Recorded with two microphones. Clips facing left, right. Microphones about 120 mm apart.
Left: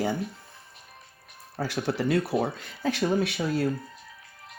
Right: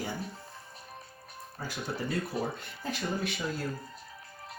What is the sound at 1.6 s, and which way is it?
Speech, 80° left.